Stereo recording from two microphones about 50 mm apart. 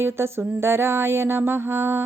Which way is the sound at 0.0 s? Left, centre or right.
Right.